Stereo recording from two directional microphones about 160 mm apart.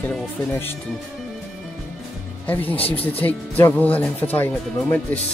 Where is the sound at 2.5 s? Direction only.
10° left (ahead or behind).